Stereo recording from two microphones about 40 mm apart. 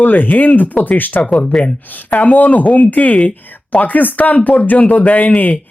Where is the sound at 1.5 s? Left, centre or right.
Centre.